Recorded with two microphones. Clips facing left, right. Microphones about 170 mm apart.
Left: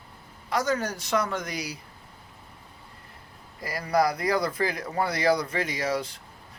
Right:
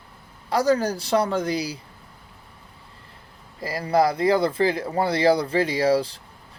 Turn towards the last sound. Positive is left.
turn(degrees=-30)  # may be behind; listen again after turning